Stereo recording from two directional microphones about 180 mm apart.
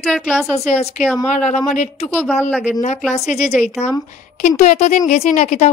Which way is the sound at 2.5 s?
5° right (ahead or behind).